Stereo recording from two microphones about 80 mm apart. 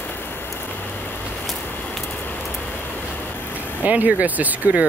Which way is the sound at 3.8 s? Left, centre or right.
Centre.